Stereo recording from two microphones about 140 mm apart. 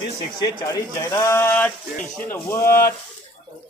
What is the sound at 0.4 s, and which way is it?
Speech, 25° left (ahead or behind).